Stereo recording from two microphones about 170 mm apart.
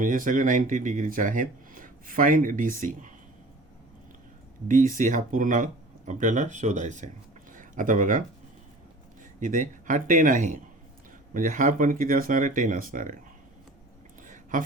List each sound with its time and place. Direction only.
0.0 s speech: 50° right (ahead or behind)
4.7 s speech: 50° right (ahead or behind)
9.4 s speech: 50° right (ahead or behind)
14.2 s a sound: 50° right (ahead or behind)